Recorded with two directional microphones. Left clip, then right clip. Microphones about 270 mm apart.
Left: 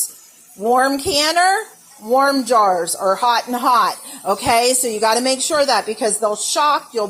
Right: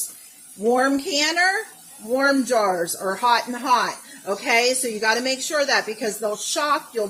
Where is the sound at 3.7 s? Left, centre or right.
Centre.